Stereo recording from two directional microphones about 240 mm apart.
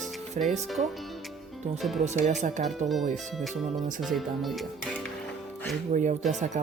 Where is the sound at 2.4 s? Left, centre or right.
Right.